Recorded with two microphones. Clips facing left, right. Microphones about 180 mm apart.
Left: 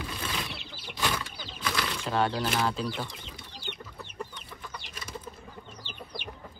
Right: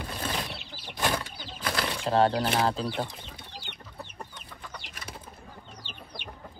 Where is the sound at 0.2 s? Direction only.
40° right (ahead or behind).